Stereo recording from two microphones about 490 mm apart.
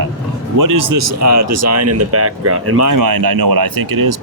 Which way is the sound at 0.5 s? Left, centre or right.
Right.